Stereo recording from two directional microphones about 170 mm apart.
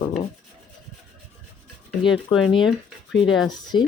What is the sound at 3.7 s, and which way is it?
Speech, 25° left (ahead or behind).